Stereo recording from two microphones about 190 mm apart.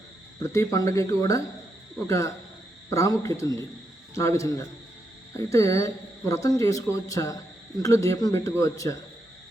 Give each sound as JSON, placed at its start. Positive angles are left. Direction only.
{"t": 0.3, "sound": "speech", "side_deg": 15}